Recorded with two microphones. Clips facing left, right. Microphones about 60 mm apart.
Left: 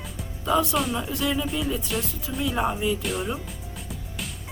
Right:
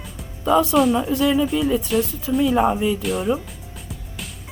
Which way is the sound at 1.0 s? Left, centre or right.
Right.